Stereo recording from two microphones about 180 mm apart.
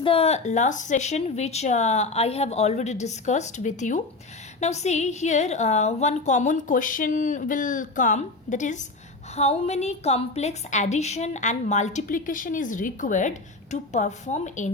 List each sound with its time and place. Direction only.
0.0 s a woman's voice: 30° left (ahead or behind)